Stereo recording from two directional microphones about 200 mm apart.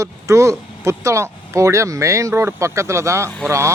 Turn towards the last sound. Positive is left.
turn(degrees=-15)  # may be behind; listen again after turning